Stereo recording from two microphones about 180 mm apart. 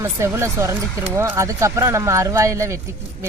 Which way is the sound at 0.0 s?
15° right (ahead or behind).